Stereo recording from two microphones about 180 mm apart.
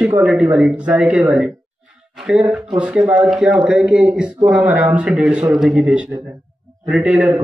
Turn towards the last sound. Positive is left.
turn(degrees=-10)  # may be behind; listen again after turning